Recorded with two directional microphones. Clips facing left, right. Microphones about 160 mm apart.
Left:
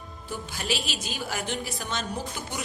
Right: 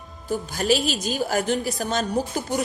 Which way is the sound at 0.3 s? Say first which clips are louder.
Right 10 dB; 40° right (ahead or behind).